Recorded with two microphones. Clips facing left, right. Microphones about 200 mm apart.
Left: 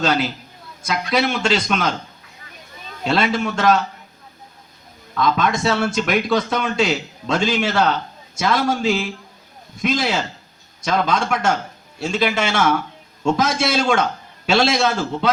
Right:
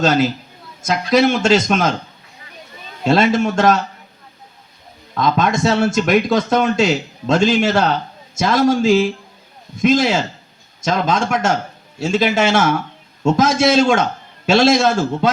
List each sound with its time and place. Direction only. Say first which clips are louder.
0.0 s speech: right 5 dB; 45° right (ahead or behind)
3.1 s speech: right 5 dB; 45° right (ahead or behind)
5.1 s speech: right 2 dB; 45° right (ahead or behind)